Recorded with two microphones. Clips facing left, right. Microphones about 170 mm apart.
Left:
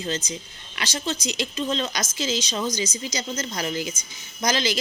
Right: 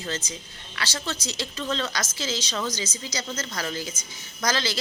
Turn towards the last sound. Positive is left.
turn(degrees=15)  # may be behind; listen again after turning